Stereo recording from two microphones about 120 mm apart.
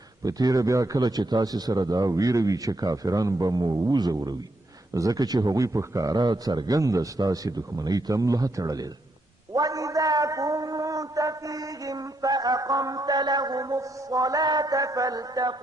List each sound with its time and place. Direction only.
0.2 s a man's voice: 30° right (ahead or behind)